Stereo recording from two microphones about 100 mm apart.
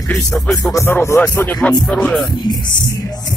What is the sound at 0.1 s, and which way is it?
Music, 5° left (ahead or behind).